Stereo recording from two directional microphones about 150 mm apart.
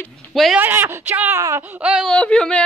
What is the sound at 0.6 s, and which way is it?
Speech, 15° right (ahead or behind).